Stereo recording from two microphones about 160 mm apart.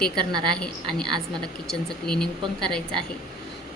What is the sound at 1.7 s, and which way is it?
Speech, 5° left (ahead or behind).